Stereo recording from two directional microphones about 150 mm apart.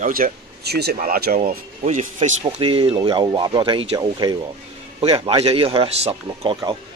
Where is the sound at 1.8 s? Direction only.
55° right (ahead or behind).